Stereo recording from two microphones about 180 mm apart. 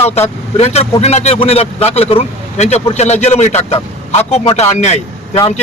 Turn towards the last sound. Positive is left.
turn(degrees=40)  # may be behind; listen again after turning